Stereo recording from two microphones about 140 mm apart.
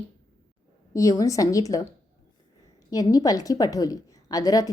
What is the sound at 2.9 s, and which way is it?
A woman's voice, 25° left (ahead or behind).